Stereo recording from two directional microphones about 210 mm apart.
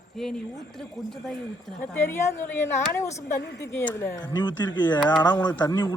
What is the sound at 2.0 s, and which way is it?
A man's voice, 10° left (ahead or behind).